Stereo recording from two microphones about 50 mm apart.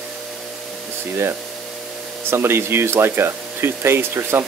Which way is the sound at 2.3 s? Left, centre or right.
Right.